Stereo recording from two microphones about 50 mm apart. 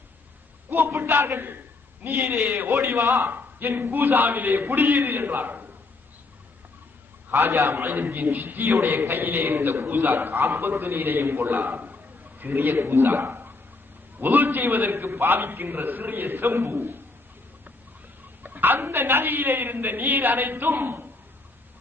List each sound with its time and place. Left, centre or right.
0.8 s a man's voice: right
3.0 s a man's voice: right
3.3 s a man's voice: right
7.3 s a man's voice: right
18.4 s a man's voice: right